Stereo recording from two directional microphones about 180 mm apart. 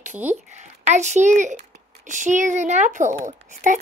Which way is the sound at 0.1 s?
10° right (ahead or behind).